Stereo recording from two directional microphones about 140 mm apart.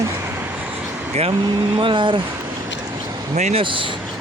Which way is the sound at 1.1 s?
45° right (ahead or behind).